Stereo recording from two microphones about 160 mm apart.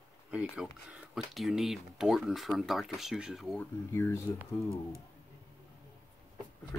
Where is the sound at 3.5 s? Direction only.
15° left (ahead or behind).